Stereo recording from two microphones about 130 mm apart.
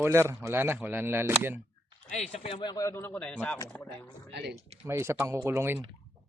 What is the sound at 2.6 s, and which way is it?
Speech, 35° left (ahead or behind).